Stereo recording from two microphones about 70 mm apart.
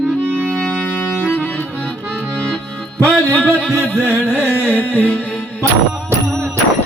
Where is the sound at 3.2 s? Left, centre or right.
Centre.